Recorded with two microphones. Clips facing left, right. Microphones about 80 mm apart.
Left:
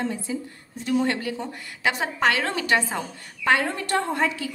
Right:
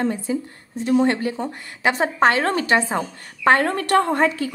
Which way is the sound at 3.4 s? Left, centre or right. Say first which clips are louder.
Right 5 dB; right.